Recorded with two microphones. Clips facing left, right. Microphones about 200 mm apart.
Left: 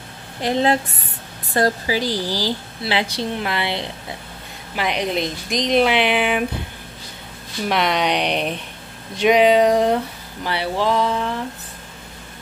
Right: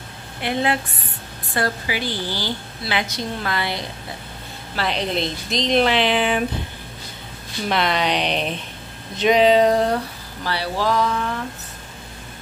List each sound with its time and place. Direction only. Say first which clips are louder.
0.4 s a woman's voice: left 4 dB; 35° left (ahead or behind)
4.7 s speech: left 1 dB; 15° left (ahead or behind)
7.6 s a woman's voice: left 1 dB; 10° left (ahead or behind); by 11.3 s 25° left (ahead or behind)